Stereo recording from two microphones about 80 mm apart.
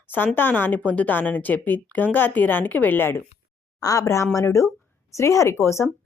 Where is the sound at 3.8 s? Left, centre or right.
Left.